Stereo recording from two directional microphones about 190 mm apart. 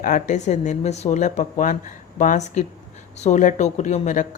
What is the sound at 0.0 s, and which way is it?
A woman's voice, 40° left (ahead or behind).